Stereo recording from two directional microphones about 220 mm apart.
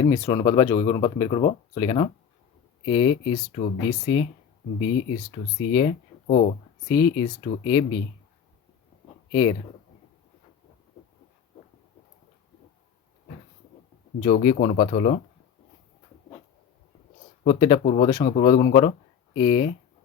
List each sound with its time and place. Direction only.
0.0 s speech: 15° left (ahead or behind)
3.6 s speech: 35° left (ahead or behind)
6.2 s speech: 35° left (ahead or behind)
6.8 s speech: 20° left (ahead or behind)
9.3 s speech: 20° left (ahead or behind)
14.3 s speech: 35° left (ahead or behind)
17.4 s speech: 20° left (ahead or behind)